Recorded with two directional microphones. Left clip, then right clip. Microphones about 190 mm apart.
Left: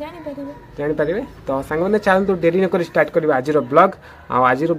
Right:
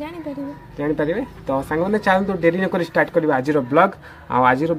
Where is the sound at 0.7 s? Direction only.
15° left (ahead or behind).